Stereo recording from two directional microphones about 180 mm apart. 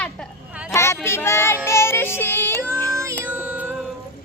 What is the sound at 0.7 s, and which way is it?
Child singing, 15° left (ahead or behind).